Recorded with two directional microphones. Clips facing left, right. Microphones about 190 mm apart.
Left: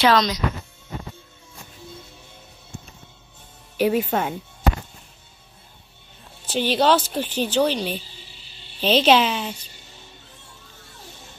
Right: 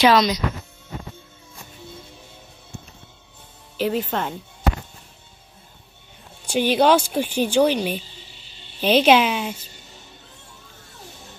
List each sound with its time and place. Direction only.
0.0 s speech: 10° right (ahead or behind)
3.7 s speech: 15° left (ahead or behind)
6.4 s speech: 10° right (ahead or behind)